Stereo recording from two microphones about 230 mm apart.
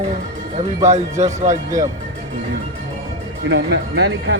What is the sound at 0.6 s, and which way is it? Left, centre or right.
Speech, right.